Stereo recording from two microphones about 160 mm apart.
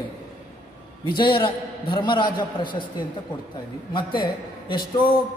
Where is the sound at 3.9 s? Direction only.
30° left (ahead or behind).